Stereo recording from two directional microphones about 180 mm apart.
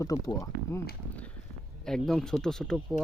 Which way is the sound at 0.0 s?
20° left (ahead or behind).